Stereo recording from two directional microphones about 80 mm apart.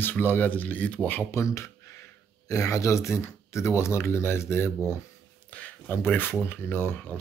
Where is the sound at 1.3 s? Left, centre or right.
Left.